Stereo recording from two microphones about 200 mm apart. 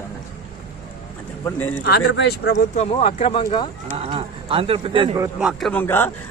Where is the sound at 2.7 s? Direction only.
30° left (ahead or behind).